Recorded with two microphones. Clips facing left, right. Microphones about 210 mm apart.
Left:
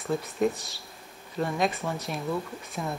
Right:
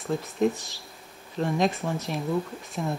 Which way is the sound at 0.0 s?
Centre (ahead or behind).